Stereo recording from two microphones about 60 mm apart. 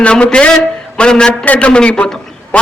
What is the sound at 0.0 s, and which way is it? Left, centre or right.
A man's voice, centre.